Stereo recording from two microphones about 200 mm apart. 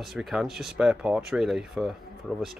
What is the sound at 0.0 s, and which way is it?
Speech, centre (ahead or behind).